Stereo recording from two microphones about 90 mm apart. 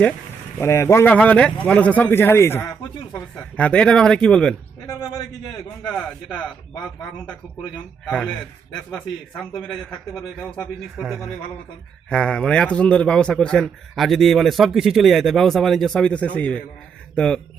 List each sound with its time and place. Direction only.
0.6 s speech: 35° left (ahead or behind)
1.0 s a man's voice: 15° left (ahead or behind)
3.1 s a man's voice: 15° left (ahead or behind)
5.8 s a man's voice: 10° left (ahead or behind)
8.0 s a man's voice: 5° left (ahead or behind)
11.0 s a man's voice: 5° right (ahead or behind)
12.0 s a man's voice: 10° left (ahead or behind)